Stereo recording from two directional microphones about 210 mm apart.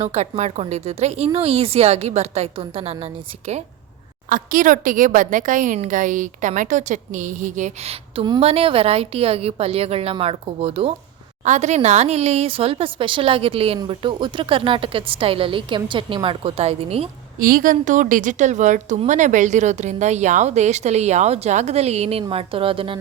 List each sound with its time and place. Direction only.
0.0 s speech: 30° right (ahead or behind)
4.3 s a woman's voice: 40° right (ahead or behind)
17.4 s a woman's voice: 40° right (ahead or behind); by 23.0 s 25° right (ahead or behind)